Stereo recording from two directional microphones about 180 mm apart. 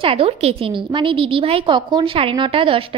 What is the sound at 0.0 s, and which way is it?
A woman's voice, 30° right (ahead or behind).